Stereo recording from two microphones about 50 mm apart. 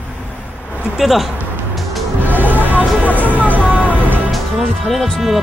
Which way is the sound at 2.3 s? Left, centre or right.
Right.